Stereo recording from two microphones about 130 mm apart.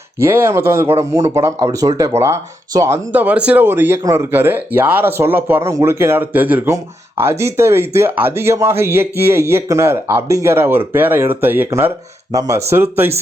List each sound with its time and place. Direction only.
0.2 s speech: 20° right (ahead or behind)
12.3 s speech: 25° right (ahead or behind)